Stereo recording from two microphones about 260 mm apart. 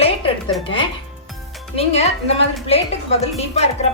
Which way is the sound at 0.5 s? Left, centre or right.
Centre.